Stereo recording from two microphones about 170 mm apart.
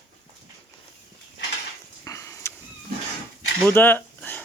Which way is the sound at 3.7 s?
10° left (ahead or behind).